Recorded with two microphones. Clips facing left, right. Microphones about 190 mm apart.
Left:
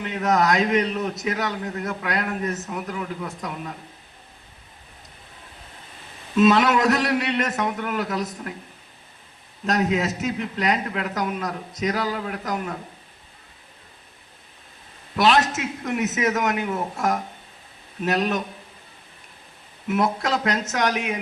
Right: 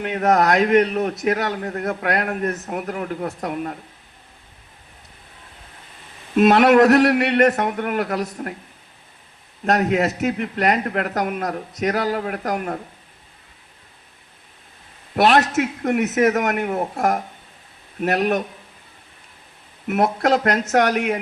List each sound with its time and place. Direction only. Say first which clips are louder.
0.0 s a man's voice: right 4 dB; 60° right (ahead or behind)
6.3 s a man's voice: right 4 dB; 60° right (ahead or behind)
9.6 s a man's voice: right 4 dB; 60° right (ahead or behind)
15.1 s a man's voice: right 3 dB; 60° right (ahead or behind)
19.9 s a man's voice: right 4 dB; 60° right (ahead or behind)